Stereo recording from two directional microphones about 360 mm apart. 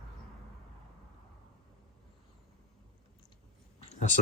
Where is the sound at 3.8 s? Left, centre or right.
Centre.